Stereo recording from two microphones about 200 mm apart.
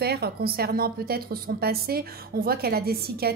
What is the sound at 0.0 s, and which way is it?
A woman's voice, 55° right (ahead or behind).